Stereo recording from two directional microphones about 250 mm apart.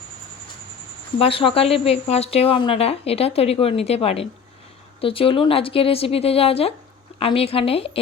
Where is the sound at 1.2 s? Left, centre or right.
Left.